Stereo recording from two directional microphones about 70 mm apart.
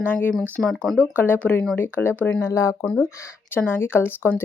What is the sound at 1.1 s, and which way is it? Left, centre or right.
Speech, left.